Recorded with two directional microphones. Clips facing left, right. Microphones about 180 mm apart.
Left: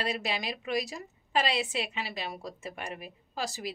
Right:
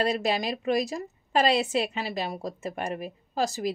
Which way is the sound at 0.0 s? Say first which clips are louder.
Right 7 dB; 45° right (ahead or behind).